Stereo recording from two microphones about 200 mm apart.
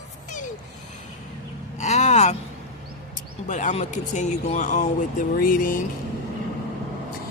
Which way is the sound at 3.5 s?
35° left (ahead or behind).